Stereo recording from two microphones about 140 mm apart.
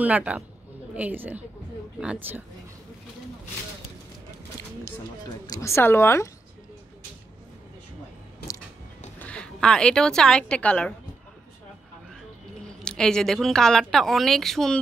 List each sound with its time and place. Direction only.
0.0 s a woman's voice: 10° right (ahead or behind)
5.5 s speech: 20° left (ahead or behind)
9.2 s a woman's voice: 5° left (ahead or behind)
12.6 s speech: 5° left (ahead or behind)